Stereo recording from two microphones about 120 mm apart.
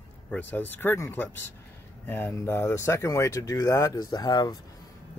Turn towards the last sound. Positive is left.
turn(degrees=35)  # may be behind; listen again after turning